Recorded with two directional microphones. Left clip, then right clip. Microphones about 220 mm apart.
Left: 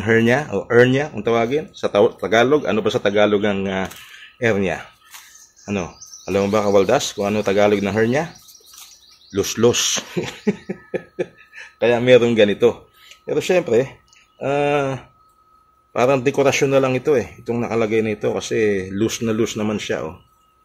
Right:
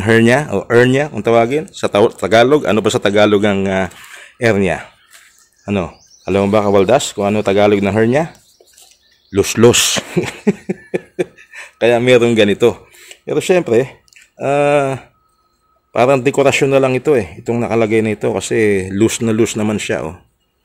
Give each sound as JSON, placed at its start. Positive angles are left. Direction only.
{"t": 0.0, "sound": "speech", "side_deg": -45}
{"t": 9.3, "sound": "speech", "side_deg": -45}